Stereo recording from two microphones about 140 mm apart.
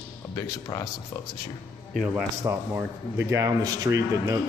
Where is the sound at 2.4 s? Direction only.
20° right (ahead or behind).